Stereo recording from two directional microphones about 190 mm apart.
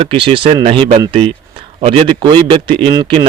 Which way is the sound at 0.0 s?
25° right (ahead or behind).